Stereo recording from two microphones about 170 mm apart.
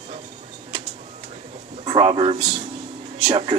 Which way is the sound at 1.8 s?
35° right (ahead or behind).